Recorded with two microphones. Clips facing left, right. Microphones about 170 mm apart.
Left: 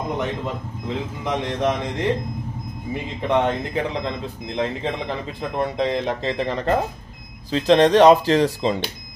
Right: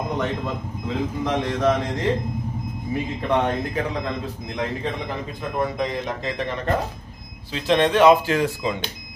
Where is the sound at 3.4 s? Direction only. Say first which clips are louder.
Left 1 dB; 25° left (ahead or behind).